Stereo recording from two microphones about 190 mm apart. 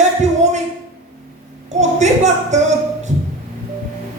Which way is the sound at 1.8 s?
35° right (ahead or behind).